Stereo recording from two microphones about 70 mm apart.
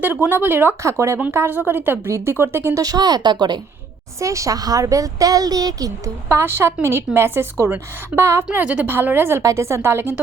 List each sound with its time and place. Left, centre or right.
0.0 s speech: right
0.8 s a woman's voice: right
2.8 s a woman's voice: right
4.2 s speech: right
6.2 s a woman's voice: right
8.6 s a woman's voice: centre
8.9 s a woman's voice: right
9.4 s a woman's voice: right